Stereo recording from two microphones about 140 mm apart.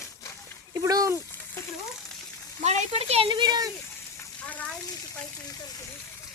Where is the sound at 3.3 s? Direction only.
30° right (ahead or behind).